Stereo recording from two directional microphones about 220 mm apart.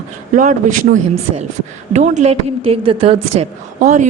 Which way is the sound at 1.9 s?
30° right (ahead or behind).